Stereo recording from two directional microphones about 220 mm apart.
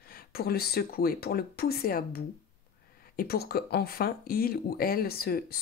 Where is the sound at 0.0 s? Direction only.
45° left (ahead or behind).